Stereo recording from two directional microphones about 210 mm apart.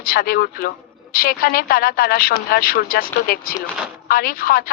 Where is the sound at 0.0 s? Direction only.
45° left (ahead or behind).